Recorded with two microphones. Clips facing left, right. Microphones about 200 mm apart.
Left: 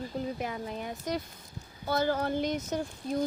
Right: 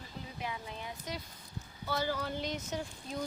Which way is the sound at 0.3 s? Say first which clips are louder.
Left 6 dB; 50° left (ahead or behind).